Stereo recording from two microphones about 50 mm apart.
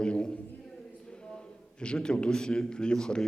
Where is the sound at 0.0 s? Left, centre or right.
Centre.